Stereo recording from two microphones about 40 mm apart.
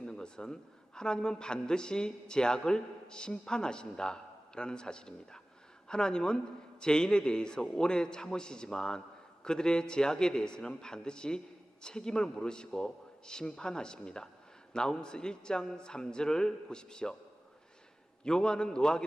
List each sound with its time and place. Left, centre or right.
0.0 s a sound: centre
0.9 s a man's voice: centre
18.2 s a man's voice: centre